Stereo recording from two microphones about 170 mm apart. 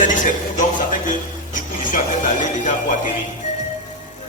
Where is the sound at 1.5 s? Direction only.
50° left (ahead or behind).